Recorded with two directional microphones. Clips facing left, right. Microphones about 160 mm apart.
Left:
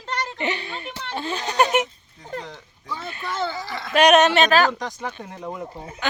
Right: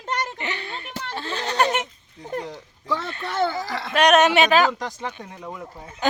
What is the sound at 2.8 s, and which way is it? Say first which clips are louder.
Speech: right 6 dB; 90° right.